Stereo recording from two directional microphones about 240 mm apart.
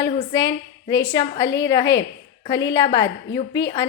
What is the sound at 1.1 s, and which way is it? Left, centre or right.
Speech, centre.